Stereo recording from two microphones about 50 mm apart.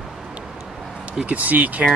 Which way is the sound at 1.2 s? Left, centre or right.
Right.